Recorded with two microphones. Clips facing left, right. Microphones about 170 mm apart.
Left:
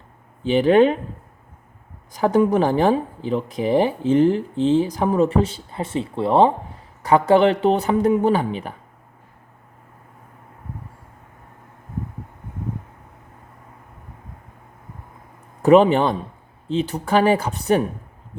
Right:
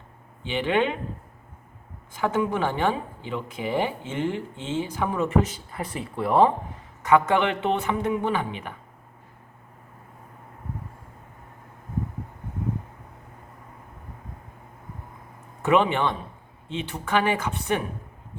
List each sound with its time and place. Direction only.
0.4 s speech: 40° left (ahead or behind)
2.1 s speech: 40° left (ahead or behind)
15.6 s speech: 35° left (ahead or behind)